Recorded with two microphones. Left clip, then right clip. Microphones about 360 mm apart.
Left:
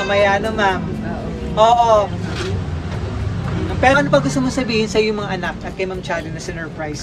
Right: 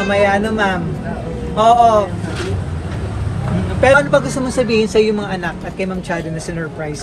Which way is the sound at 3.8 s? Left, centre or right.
Left.